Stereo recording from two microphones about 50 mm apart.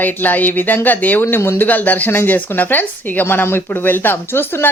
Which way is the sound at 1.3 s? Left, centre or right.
Left.